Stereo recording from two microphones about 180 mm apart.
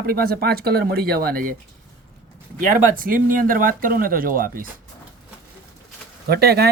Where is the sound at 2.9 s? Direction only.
50° right (ahead or behind).